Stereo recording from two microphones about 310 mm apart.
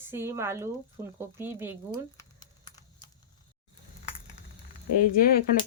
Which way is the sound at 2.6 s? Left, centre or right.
Centre.